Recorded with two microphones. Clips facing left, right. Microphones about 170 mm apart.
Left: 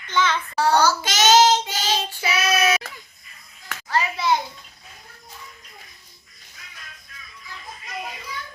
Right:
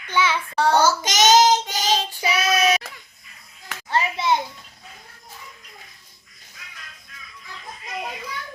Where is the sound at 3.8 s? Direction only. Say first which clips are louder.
Even; 25° right (ahead or behind).